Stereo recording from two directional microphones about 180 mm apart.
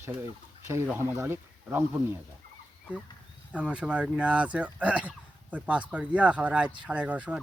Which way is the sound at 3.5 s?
5° right (ahead or behind).